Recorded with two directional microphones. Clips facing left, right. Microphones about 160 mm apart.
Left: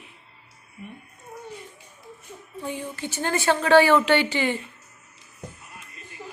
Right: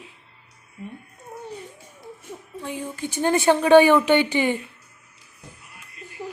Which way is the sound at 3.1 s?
15° right (ahead or behind).